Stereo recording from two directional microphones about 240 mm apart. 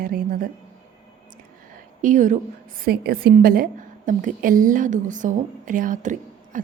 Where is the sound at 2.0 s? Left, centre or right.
Right.